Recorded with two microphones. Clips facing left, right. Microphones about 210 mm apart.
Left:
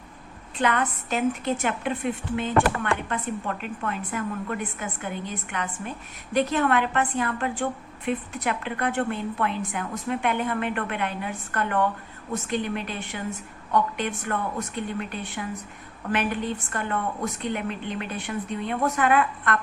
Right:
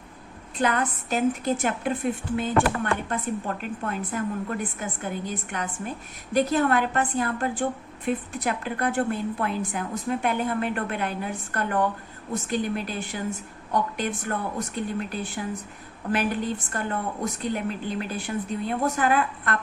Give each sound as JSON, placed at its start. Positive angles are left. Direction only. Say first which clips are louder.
{"t": 0.6, "sound": "a woman's voice", "louder": "even", "side_deg": -40}